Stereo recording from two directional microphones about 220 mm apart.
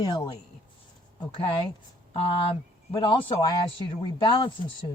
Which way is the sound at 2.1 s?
25° left (ahead or behind).